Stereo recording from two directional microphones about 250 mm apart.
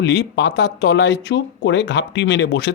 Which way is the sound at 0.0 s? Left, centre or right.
Left.